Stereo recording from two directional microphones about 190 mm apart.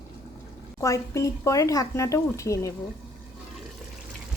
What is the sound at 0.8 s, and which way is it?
Speech, 15° left (ahead or behind).